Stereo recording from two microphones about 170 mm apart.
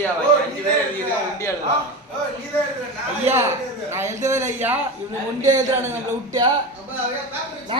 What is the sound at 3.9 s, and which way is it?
Speech, 15° right (ahead or behind).